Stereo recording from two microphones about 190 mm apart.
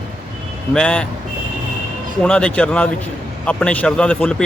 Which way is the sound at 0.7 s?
5° left (ahead or behind).